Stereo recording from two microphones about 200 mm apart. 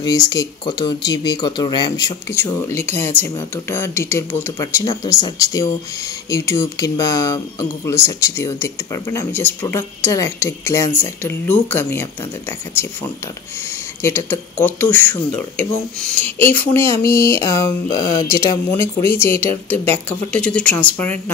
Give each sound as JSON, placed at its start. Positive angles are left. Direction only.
{"t": 0.0, "sound": "speech", "side_deg": 20}
{"t": 14.0, "sound": "speech", "side_deg": 10}